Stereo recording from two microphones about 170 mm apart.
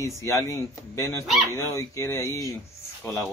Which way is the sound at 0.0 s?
15° left (ahead or behind).